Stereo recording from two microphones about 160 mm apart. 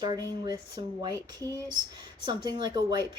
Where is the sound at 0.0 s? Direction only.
25° right (ahead or behind).